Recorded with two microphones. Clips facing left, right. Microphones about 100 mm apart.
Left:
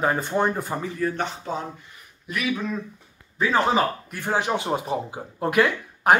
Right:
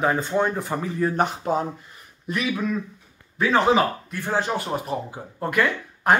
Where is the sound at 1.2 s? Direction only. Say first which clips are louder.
Right 6 dB; 45° right (ahead or behind).